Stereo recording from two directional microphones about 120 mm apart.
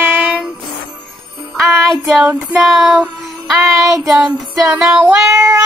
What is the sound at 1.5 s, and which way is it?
Child singing, centre (ahead or behind).